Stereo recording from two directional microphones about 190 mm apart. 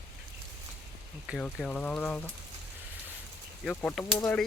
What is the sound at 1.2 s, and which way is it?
Speech, centre (ahead or behind).